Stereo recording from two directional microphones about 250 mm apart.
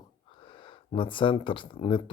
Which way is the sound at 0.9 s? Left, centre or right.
Centre.